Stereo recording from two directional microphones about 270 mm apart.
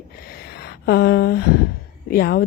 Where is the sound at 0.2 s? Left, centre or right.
Left.